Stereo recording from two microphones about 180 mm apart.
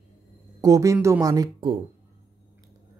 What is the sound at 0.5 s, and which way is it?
Speech, 20° right (ahead or behind).